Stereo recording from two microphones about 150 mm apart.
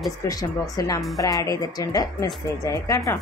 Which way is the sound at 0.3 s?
25° left (ahead or behind).